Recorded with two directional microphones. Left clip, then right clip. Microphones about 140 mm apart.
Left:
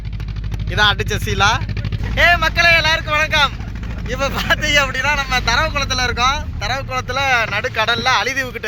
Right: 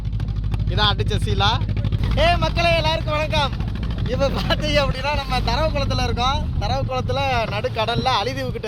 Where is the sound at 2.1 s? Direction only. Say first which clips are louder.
Left 6 dB; 15° right (ahead or behind).